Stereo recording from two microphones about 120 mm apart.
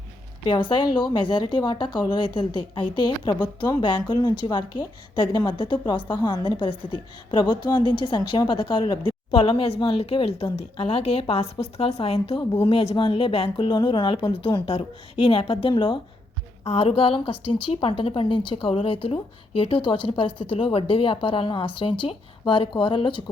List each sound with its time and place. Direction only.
0.4 s a woman's voice: 45° left (ahead or behind)
16.6 s a woman's voice: 55° left (ahead or behind)